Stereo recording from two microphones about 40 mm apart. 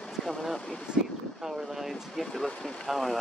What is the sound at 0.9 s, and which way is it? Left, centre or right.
Speech, right.